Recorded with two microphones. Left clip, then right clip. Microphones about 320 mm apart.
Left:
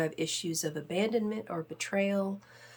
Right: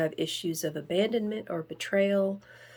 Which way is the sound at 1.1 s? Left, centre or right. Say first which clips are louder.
Right 2 dB; left.